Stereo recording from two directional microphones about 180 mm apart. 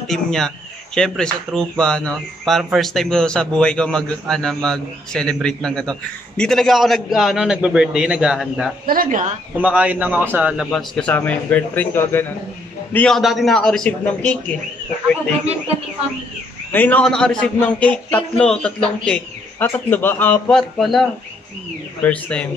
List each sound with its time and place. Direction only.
0.1 s speech: centre (ahead or behind)
8.8 s speech: 55° right (ahead or behind)
9.6 s a man's voice: 10° right (ahead or behind)
10.7 s a man's voice: 5° left (ahead or behind)
16.7 s a man's voice: 10° left (ahead or behind)